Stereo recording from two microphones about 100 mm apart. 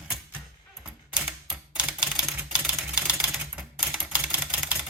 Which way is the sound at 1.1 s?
5° right (ahead or behind).